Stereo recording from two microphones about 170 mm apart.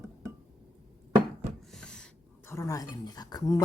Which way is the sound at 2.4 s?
15° left (ahead or behind).